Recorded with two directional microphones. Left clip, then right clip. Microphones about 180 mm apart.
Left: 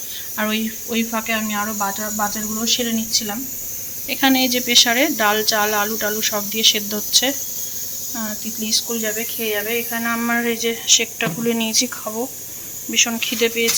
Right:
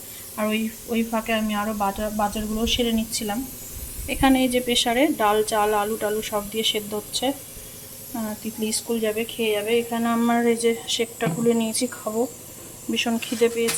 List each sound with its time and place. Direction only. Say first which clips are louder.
0.3 s speech: left 3 dB; 5° right (ahead or behind)
1.3 s speech: left 2 dB; 20° right (ahead or behind)
4.1 s speech: left 2 dB; 10° right (ahead or behind)
8.1 s speech: left 1 dB; 15° right (ahead or behind)
12.9 s speech: left 6 dB; 20° right (ahead or behind)